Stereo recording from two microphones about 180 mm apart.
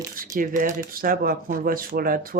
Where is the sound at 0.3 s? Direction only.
50° right (ahead or behind).